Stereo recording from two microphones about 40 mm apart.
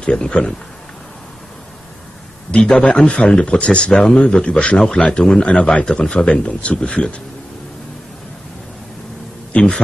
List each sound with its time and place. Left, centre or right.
0.0 s a man's voice: left
2.5 s a man's voice: centre
9.5 s a man's voice: left